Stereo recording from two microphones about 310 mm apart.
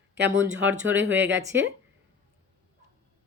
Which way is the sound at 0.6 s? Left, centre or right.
Centre.